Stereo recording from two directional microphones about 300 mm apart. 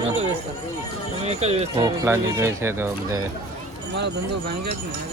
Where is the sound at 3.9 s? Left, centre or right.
Right.